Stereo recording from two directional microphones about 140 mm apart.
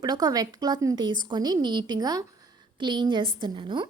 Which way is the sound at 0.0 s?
30° right (ahead or behind).